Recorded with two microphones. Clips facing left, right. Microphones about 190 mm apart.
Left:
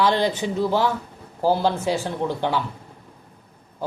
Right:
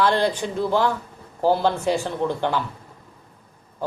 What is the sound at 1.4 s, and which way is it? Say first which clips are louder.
A man's voice: right 1 dB; centre (ahead or behind).